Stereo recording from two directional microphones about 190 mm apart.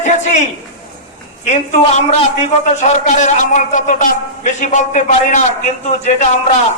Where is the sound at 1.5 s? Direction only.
35° left (ahead or behind).